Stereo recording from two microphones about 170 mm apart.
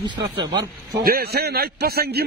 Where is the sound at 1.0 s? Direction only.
65° right (ahead or behind).